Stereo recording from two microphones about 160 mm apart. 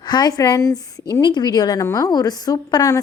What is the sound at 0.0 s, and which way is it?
A woman's voice, 25° left (ahead or behind).